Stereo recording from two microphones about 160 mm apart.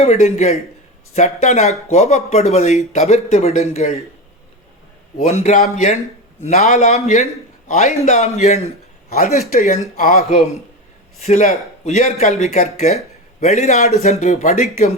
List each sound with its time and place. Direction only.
0.0 s a man's voice: 45° left (ahead or behind)
5.1 s a man's voice: 45° left (ahead or behind)
9.0 s speech: 65° left (ahead or behind)
9.5 s a man's voice: 50° left (ahead or behind)